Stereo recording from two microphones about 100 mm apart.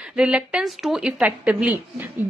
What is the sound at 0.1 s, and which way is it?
A woman's voice, 10° right (ahead or behind).